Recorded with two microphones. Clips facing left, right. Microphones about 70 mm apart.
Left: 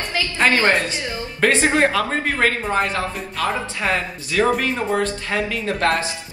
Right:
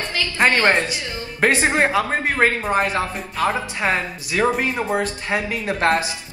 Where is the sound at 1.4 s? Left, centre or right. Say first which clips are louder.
Left 1 dB; right.